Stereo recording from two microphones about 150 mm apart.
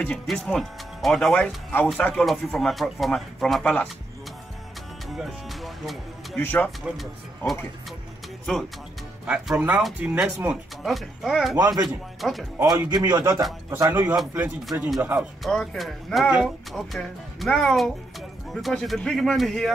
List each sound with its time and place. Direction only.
0.0 s speech: 5° left (ahead or behind)
5.1 s speech: centre (ahead or behind)
6.4 s speech: 10° left (ahead or behind)
8.5 s speech: 5° left (ahead or behind)
9.2 s speech: 10° right (ahead or behind)
10.8 s speech: centre (ahead or behind)
11.5 s speech: 25° right (ahead or behind)
12.2 s speech: centre (ahead or behind)
12.6 s speech: 25° right (ahead or behind)
15.4 s speech: 5° left (ahead or behind)